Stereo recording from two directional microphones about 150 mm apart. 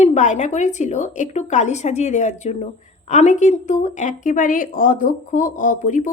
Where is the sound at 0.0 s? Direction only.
50° left (ahead or behind).